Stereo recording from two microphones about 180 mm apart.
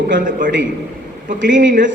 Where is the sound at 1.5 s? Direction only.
45° right (ahead or behind).